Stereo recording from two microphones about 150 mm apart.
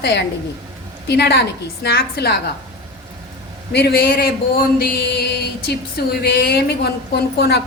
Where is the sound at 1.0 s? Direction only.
90° left.